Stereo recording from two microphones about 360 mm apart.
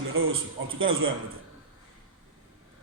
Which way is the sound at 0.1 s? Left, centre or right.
Right.